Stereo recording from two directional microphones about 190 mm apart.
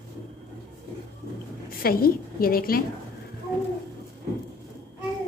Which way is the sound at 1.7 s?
50° left (ahead or behind).